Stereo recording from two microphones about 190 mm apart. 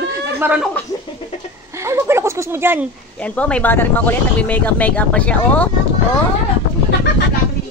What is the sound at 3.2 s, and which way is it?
Speech, 5° left (ahead or behind).